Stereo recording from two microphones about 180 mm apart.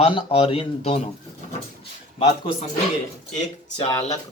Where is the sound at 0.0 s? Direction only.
30° left (ahead or behind).